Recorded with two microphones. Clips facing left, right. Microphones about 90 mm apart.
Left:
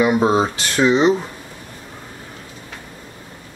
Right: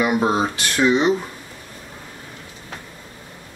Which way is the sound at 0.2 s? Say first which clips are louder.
Left 3 dB; 20° left (ahead or behind).